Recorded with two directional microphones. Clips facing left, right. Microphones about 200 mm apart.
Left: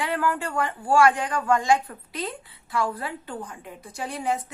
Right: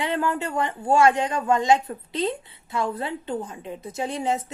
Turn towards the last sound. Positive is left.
turn(degrees=-25)  # may be behind; listen again after turning